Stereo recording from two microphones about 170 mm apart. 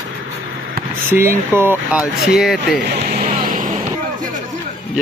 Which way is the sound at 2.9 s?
50° right (ahead or behind).